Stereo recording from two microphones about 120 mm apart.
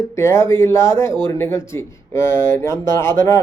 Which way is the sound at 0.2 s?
25° left (ahead or behind).